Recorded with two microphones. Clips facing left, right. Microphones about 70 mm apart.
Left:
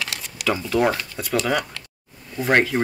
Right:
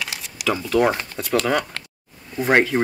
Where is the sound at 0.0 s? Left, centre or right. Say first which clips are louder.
Even; centre.